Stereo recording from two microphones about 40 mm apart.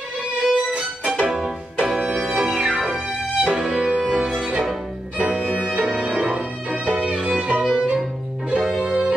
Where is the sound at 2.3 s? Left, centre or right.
Right.